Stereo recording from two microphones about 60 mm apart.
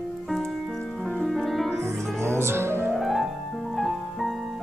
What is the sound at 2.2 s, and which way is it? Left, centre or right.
Music, right.